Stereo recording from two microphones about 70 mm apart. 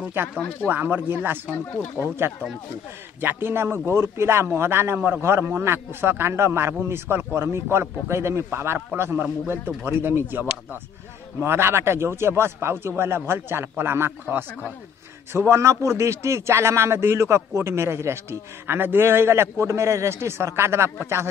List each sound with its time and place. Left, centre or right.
0.2 s a man's voice: right
15.3 s a man's voice: right